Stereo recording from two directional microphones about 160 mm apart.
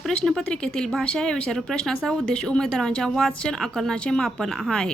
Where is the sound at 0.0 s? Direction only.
5° left (ahead or behind).